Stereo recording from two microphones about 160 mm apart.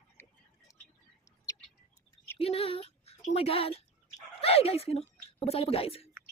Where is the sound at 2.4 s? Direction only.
40° left (ahead or behind).